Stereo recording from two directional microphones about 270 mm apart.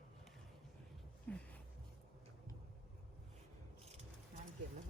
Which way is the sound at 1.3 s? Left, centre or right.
Centre.